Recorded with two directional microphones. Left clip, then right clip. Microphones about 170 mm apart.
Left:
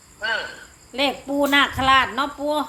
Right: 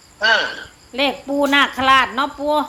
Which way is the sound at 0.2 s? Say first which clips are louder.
Right 9 dB; 65° right (ahead or behind).